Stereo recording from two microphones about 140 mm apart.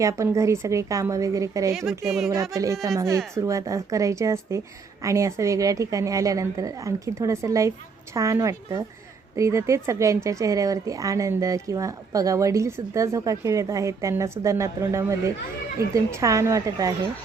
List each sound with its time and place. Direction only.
0.0 s speech: 20° right (ahead or behind)
2.0 s speech: centre (ahead or behind)
2.3 s speech: 25° right (ahead or behind)